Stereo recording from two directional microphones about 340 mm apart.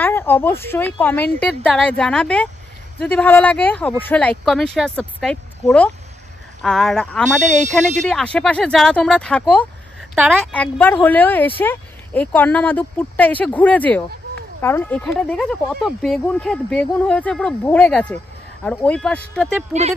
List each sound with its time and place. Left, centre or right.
0.0 s speech: centre
7.4 s speech: right
8.1 s speech: centre